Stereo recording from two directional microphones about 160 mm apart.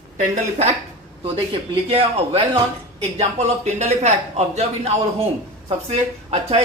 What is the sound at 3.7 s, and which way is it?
A man's voice, 45° right (ahead or behind).